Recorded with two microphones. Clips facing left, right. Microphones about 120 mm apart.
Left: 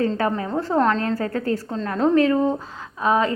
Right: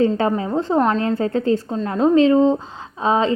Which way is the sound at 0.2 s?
20° right (ahead or behind).